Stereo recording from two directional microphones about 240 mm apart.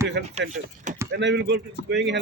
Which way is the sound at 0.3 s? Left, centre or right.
Right.